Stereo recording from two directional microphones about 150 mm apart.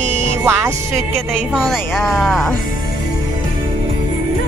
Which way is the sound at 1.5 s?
Centre (ahead or behind).